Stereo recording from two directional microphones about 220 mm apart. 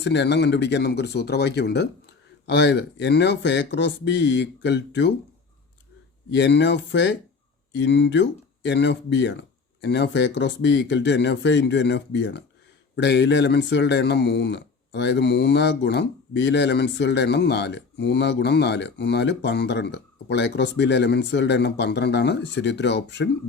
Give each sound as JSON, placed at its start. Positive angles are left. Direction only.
{"t": 0.0, "sound": "speech", "side_deg": 50}
{"t": 6.3, "sound": "speech", "side_deg": 55}